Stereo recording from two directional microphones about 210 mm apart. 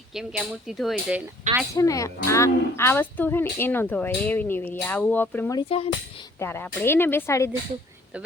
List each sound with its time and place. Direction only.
0.1 s speech: centre (ahead or behind)
1.7 s speech: 15° left (ahead or behind)
5.5 s speech: 25° left (ahead or behind)
6.4 s speech: 10° left (ahead or behind)